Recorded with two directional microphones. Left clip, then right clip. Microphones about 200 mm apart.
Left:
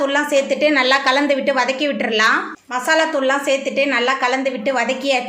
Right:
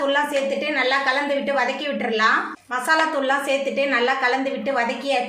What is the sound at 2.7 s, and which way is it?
A woman's voice, 30° left (ahead or behind).